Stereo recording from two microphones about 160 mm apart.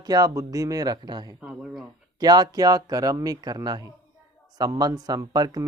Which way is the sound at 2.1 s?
25° right (ahead or behind).